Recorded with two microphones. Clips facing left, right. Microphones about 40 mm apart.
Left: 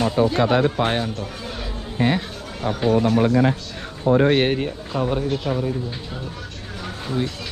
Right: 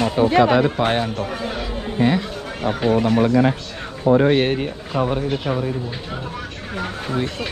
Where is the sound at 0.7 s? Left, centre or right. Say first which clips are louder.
Right 2 dB; centre.